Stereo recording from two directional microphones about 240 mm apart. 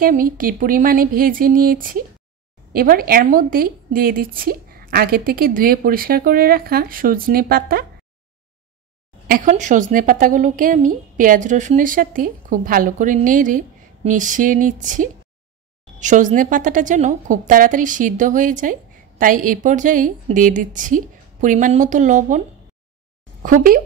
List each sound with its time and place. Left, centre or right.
0.0 s a woman's voice: right
9.3 s a woman's voice: right
23.4 s a woman's voice: right